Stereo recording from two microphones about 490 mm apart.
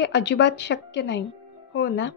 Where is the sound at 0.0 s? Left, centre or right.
Left.